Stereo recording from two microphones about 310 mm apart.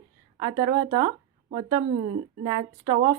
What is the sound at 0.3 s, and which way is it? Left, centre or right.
A woman's voice, centre.